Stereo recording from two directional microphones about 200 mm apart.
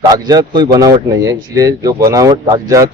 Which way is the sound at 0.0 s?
20° right (ahead or behind).